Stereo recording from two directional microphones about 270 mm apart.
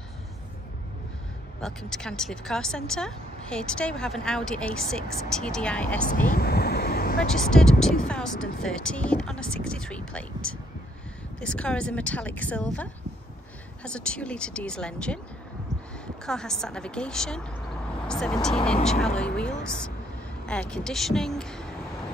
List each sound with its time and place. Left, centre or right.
1.6 s speech: centre
6.2 s vehicle: left
7.2 s speech: centre
16.3 s speech: centre